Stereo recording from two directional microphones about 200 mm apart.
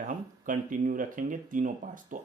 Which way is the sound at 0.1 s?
40° right (ahead or behind).